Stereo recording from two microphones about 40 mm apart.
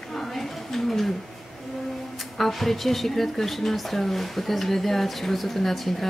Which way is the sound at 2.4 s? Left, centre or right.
Centre.